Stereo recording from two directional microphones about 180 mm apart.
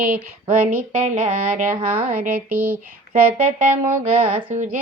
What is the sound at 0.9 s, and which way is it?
Music, 45° right (ahead or behind).